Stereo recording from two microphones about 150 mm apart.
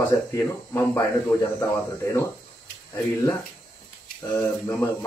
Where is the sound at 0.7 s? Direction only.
15° left (ahead or behind).